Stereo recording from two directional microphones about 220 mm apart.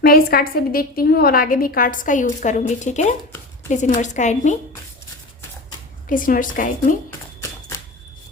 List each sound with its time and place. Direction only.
0.0 s a woman's voice: 45° left (ahead or behind)
6.1 s a woman's voice: 40° left (ahead or behind)